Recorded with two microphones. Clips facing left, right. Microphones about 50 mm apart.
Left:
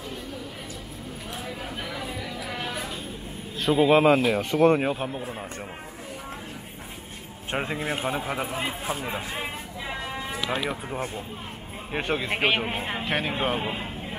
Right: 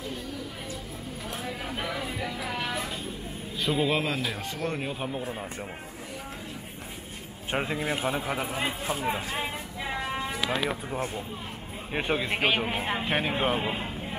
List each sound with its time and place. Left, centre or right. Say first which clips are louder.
1.9 s music: right 1 dB; centre
3.7 s a man's voice: left 6 dB; centre
4.0 s speech: left 10 dB; left
4.9 s a man's voice: left 2 dB; centre
7.5 s speech: left 1 dB; centre
8.8 s a sound: right 1 dB; centre
10.6 s speech: even; centre
12.3 s a man's voice: left 4 dB; centre
12.6 s speech: even; centre